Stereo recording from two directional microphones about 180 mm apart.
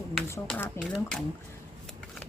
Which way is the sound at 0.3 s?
10° left (ahead or behind).